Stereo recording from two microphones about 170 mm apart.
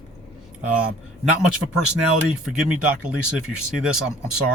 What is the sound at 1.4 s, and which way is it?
Speech, 5° right (ahead or behind).